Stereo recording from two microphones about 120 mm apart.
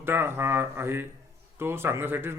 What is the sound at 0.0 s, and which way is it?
A man's voice, 20° right (ahead or behind).